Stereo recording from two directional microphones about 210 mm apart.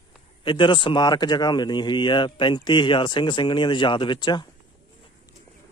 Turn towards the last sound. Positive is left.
turn(degrees=20)  # may be behind; listen again after turning